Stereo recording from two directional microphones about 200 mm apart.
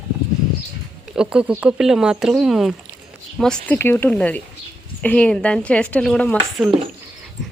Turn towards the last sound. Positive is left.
turn(degrees=5)  # may be behind; listen again after turning